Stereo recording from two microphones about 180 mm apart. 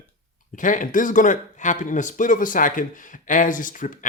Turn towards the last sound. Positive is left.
turn(degrees=45)  # may be behind; listen again after turning